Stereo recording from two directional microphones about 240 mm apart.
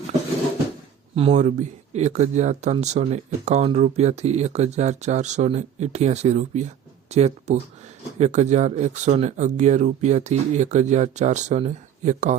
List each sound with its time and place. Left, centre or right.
1.1 s speech: right